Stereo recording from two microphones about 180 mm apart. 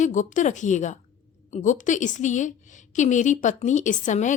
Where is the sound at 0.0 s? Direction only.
45° left (ahead or behind).